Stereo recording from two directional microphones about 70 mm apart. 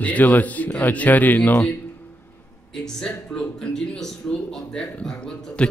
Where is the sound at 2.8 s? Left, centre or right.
Centre.